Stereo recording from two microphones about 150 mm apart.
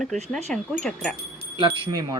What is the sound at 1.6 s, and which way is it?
Speech, 30° right (ahead or behind).